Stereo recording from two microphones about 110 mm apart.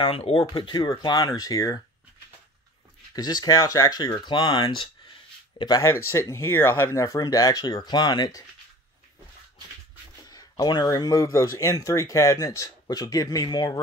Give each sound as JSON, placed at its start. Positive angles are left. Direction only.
{"t": 0.0, "sound": "speech", "side_deg": 60}
{"t": 0.8, "sound": "speech", "side_deg": 35}
{"t": 3.2, "sound": "speech", "side_deg": 35}
{"t": 5.8, "sound": "speech", "side_deg": 25}
{"t": 10.6, "sound": "speech", "side_deg": 35}